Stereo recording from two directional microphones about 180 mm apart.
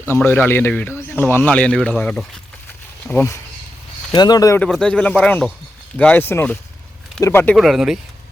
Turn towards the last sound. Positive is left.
turn(degrees=0)  # may be behind; listen again after turning